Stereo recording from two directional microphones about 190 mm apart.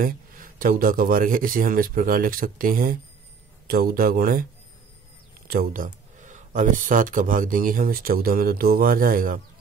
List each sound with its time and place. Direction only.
0.0 s speech: 45° right (ahead or behind)
5.5 s speech: 50° right (ahead or behind)